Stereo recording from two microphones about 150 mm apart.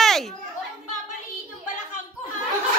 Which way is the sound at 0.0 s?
Centre (ahead or behind).